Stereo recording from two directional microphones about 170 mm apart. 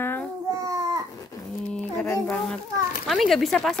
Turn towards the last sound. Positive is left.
turn(degrees=0)  # may be behind; listen again after turning